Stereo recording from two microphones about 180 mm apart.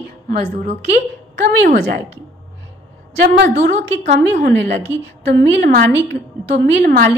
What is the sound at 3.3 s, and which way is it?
A woman's voice, 70° right (ahead or behind).